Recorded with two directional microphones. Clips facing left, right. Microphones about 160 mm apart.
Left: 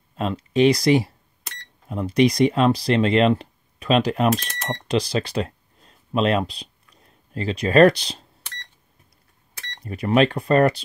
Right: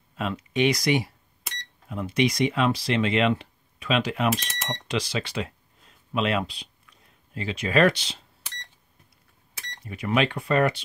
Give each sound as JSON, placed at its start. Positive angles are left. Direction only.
{"t": 0.1, "sound": "speech", "side_deg": 35}
{"t": 9.8, "sound": "speech", "side_deg": 35}